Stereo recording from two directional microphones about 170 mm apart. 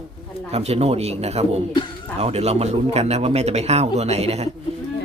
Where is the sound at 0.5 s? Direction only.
40° right (ahead or behind).